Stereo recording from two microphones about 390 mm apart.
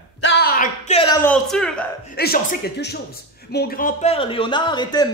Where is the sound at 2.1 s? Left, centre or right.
Left.